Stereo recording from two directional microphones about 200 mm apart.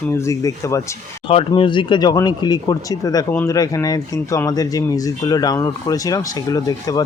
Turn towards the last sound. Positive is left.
turn(degrees=20)  # may be behind; listen again after turning